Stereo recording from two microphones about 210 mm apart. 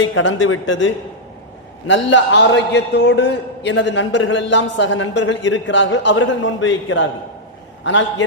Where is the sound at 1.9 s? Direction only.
60° left (ahead or behind).